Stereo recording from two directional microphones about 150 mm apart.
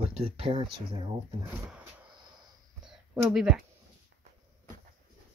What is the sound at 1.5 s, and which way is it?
Speech, 10° right (ahead or behind).